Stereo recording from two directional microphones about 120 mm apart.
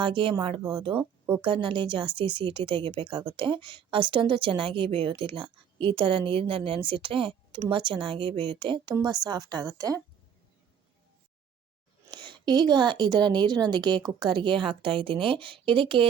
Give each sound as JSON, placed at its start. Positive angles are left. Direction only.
{"t": 0.0, "sound": "a woman's voice", "side_deg": -45}
{"t": 12.1, "sound": "a woman's voice", "side_deg": -40}